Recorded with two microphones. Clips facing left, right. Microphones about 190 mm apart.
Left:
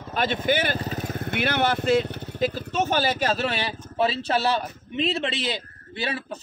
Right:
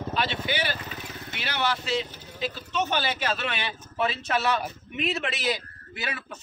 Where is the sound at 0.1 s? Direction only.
50° left (ahead or behind).